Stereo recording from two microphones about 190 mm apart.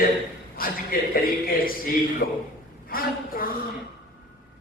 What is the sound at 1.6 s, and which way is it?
Speech, 50° left (ahead or behind).